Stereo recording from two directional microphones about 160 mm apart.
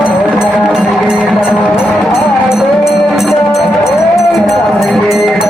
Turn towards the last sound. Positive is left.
turn(degrees=0)  # may be behind; listen again after turning